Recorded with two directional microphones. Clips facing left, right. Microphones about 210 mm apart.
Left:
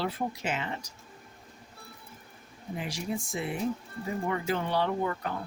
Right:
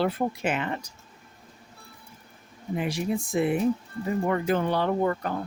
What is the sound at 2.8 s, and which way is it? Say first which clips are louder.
Speech: right 6 dB; 60° right (ahead or behind).